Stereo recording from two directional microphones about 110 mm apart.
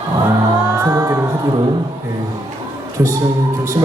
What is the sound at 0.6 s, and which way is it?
Music, 35° right (ahead or behind).